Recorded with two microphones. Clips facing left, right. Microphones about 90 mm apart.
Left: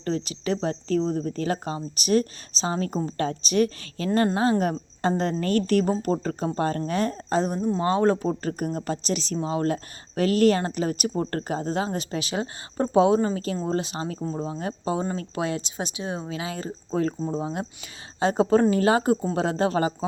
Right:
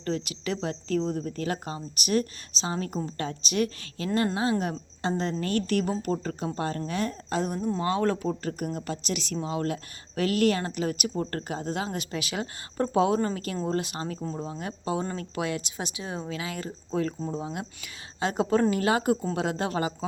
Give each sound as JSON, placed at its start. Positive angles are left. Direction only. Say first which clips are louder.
{"t": 0.0, "sound": "a woman's voice", "louder": "left 3 dB", "side_deg": 30}